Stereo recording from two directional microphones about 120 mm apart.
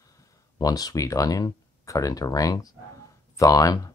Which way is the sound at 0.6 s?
30° left (ahead or behind).